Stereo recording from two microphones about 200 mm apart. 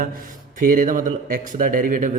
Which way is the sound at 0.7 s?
40° right (ahead or behind).